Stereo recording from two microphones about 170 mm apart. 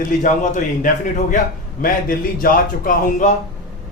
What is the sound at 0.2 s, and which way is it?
A man's voice, 45° left (ahead or behind).